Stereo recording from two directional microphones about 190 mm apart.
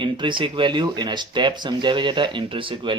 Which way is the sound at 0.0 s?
25° right (ahead or behind).